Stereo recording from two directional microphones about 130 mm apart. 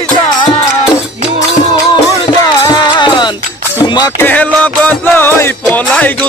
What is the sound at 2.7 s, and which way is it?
Music, 35° left (ahead or behind).